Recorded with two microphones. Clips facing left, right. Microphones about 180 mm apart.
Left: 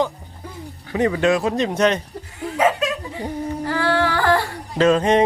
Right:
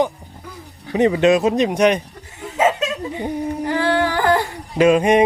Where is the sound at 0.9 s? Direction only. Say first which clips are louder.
Right 4 dB; 20° right (ahead or behind).